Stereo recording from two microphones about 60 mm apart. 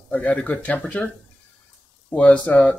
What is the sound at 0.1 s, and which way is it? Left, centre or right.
Speech, centre.